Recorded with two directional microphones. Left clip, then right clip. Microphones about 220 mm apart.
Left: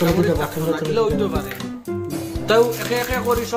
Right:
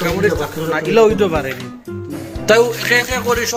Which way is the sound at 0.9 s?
25° right (ahead or behind).